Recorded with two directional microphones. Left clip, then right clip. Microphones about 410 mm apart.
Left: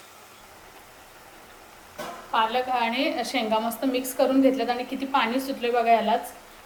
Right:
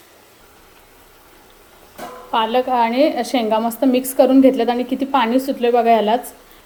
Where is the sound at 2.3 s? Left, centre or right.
Centre.